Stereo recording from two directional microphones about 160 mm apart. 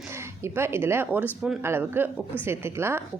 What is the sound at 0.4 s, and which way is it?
Speech, 15° right (ahead or behind).